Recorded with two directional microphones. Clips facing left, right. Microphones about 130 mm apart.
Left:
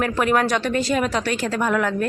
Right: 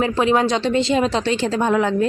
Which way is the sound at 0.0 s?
20° right (ahead or behind).